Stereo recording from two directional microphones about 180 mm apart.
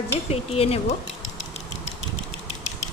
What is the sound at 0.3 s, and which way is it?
Speech, 35° left (ahead or behind).